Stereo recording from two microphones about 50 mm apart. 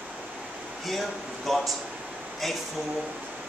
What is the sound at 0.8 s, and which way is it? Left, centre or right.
Speech, centre.